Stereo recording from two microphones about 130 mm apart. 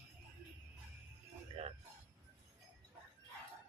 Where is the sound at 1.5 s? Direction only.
45° right (ahead or behind).